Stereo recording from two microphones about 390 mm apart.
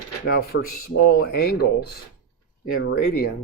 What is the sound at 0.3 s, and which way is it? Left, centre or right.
Speech, left.